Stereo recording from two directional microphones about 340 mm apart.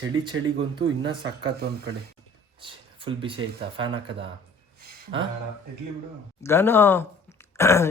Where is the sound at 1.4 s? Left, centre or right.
Right.